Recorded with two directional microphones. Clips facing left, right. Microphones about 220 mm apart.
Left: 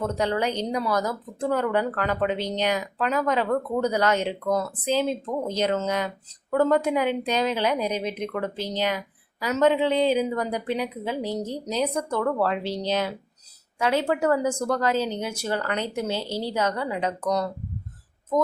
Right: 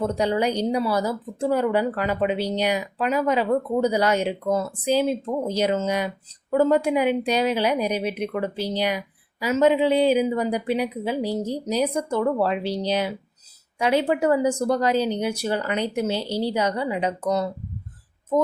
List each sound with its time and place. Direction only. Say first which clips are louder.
0.0 s speech: right 3 dB; 10° right (ahead or behind)